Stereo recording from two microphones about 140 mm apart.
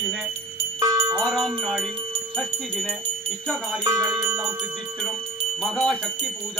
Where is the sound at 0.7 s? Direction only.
20° right (ahead or behind).